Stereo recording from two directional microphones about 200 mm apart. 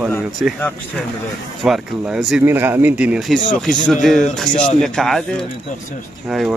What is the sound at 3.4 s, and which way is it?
Speech, 40° left (ahead or behind).